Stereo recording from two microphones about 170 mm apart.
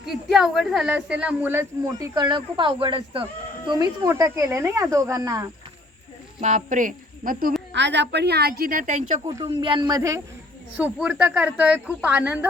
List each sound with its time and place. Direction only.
0.0 s speech: centre (ahead or behind); by 3.2 s 30° right (ahead or behind)
4.0 s speech: 15° right (ahead or behind)
6.4 s a woman's voice: 45° right (ahead or behind)
7.7 s a woman's voice: 90° right; by 9.2 s 45° right (ahead or behind)
9.2 s speech: 30° right (ahead or behind)
10.8 s speech: 10° right (ahead or behind)